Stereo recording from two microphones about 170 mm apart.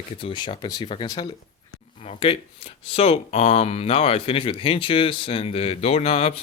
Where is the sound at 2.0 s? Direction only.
35° left (ahead or behind).